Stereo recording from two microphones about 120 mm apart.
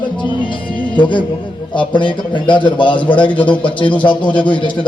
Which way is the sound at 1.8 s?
45° left (ahead or behind).